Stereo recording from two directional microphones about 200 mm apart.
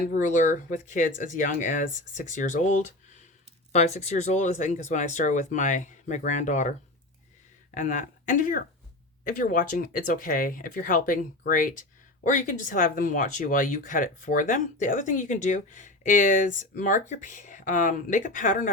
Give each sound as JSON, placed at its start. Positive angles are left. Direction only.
{"t": 0.0, "sound": "speech", "side_deg": 40}